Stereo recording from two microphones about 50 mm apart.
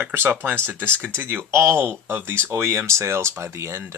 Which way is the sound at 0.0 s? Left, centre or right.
Right.